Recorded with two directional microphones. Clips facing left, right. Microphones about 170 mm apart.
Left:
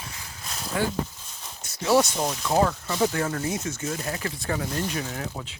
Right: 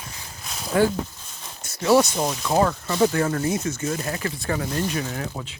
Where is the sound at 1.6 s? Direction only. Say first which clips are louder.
Right 3 dB; 60° right (ahead or behind).